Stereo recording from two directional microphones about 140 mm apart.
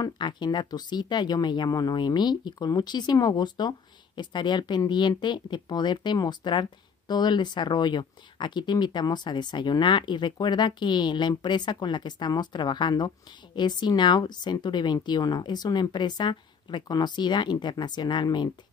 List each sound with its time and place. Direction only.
0.0 s speech: 30° left (ahead or behind)